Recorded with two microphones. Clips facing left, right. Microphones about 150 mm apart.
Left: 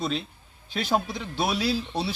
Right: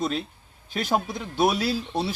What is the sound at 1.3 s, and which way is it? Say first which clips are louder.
Speech: right 4 dB; 50° right (ahead or behind).